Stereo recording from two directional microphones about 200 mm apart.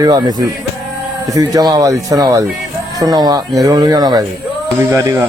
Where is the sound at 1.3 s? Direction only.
15° right (ahead or behind).